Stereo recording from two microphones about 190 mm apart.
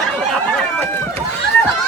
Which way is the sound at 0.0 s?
Centre (ahead or behind).